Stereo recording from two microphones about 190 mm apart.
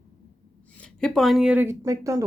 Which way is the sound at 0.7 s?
5° left (ahead or behind).